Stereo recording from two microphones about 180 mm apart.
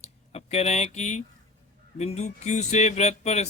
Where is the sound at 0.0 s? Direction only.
35° left (ahead or behind).